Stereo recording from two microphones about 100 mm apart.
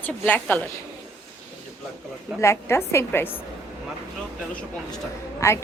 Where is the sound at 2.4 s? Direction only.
25° left (ahead or behind).